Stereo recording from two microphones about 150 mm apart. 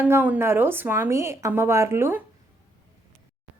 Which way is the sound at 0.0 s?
15° right (ahead or behind).